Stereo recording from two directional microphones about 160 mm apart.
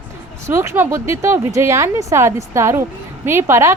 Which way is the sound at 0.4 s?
15° right (ahead or behind).